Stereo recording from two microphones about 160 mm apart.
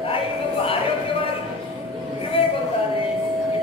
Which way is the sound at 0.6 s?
35° left (ahead or behind).